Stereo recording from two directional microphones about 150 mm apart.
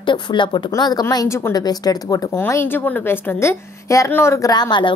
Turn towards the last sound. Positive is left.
turn(degrees=30)  # may be behind; listen again after turning